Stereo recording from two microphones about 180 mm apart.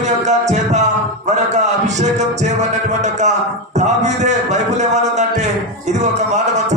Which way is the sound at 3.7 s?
40° right (ahead or behind).